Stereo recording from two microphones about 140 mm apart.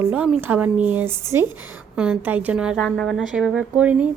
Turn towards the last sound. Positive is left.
turn(degrees=-10)  # may be behind; listen again after turning